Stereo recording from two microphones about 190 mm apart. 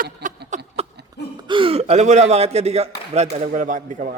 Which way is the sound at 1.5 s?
25° right (ahead or behind).